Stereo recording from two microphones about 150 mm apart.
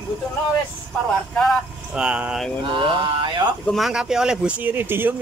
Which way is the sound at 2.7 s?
35° right (ahead or behind).